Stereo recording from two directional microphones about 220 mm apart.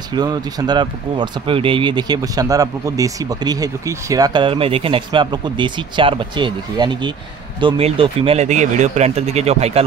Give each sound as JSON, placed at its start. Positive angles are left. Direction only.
{"t": 0.1, "sound": "speech", "side_deg": -20}